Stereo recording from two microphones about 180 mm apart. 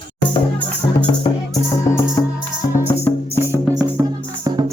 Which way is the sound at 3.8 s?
20° right (ahead or behind).